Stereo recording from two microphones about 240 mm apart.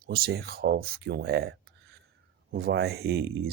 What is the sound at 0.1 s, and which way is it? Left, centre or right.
Speech, right.